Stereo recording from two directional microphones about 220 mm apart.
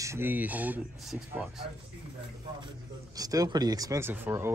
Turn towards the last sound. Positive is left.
turn(degrees=-10)  # may be behind; listen again after turning